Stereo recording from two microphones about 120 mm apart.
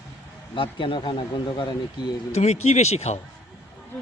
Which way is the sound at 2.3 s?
70° left (ahead or behind).